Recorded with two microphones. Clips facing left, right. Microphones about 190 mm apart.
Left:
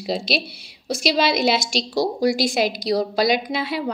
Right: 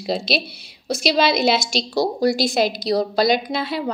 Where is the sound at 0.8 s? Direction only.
10° left (ahead or behind).